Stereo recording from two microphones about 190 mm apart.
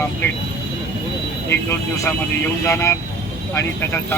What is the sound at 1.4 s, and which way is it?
Speech, 10° left (ahead or behind).